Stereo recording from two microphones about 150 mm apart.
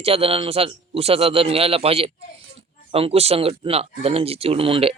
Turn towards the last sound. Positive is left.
turn(degrees=-40)  # may be behind; listen again after turning